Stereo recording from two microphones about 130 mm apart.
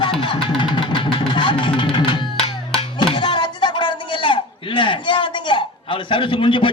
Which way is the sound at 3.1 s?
35° left (ahead or behind).